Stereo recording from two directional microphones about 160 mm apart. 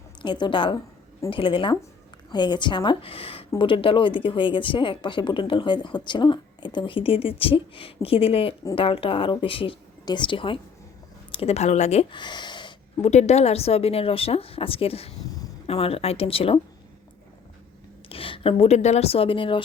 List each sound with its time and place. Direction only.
0.2 s a woman's voice: 30° left (ahead or behind)
12.1 s gasp: 30° left (ahead or behind)
13.0 s speech: 45° left (ahead or behind)
18.1 s a woman's voice: 35° left (ahead or behind)